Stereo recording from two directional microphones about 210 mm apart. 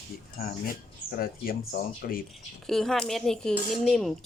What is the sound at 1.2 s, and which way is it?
Speech, 45° left (ahead or behind).